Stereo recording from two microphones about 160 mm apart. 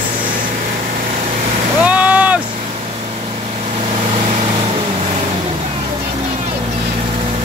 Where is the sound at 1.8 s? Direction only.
10° right (ahead or behind).